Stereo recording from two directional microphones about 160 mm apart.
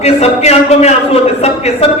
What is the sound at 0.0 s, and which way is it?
A man's voice, 40° left (ahead or behind).